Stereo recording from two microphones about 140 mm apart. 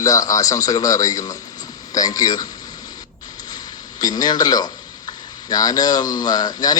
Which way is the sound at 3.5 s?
30° left (ahead or behind).